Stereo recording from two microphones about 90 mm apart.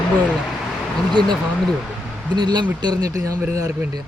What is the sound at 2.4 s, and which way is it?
A man's voice, 55° right (ahead or behind).